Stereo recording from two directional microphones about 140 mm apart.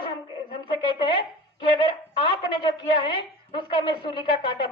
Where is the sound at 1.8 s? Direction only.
35° left (ahead or behind).